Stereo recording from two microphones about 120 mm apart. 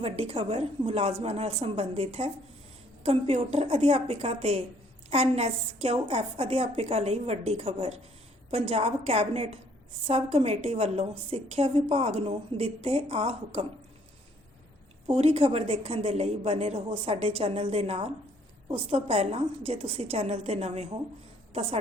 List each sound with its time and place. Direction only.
0.0 s a woman's voice: 55° right (ahead or behind)
15.1 s a woman's voice: 55° right (ahead or behind)